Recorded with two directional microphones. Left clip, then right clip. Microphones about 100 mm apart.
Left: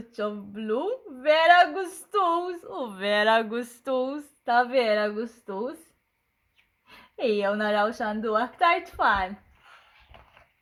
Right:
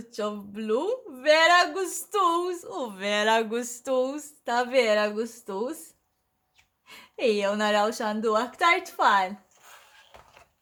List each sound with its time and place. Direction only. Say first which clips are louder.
0.5 s speech: right 3 dB; 5° left (ahead or behind)
2.9 s a woman's voice: left 2 dB; 20° left (ahead or behind); by 5.7 s centre (ahead or behind)
6.8 s a woman's voice: right 2 dB; 5° left (ahead or behind)